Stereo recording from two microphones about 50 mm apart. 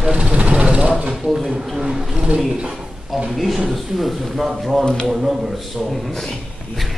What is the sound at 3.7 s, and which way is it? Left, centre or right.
Speech, centre.